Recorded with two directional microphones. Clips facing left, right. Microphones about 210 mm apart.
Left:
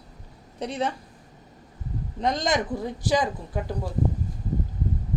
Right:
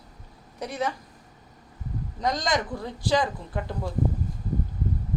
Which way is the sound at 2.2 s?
25° left (ahead or behind).